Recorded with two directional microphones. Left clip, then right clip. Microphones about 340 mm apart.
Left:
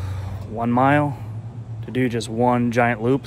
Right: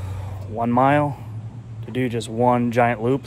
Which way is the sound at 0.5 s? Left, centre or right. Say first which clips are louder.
Even; centre.